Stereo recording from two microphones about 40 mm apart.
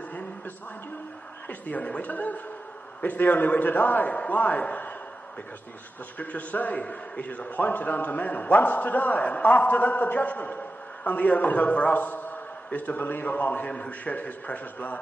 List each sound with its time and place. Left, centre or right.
1.5 s a man's voice: left
6.1 s a man's voice: left
13.7 s a man's voice: left